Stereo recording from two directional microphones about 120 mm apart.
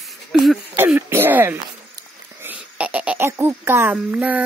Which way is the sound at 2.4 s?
15° right (ahead or behind).